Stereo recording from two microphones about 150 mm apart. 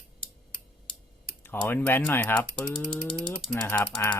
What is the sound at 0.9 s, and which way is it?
Typing, 35° left (ahead or behind).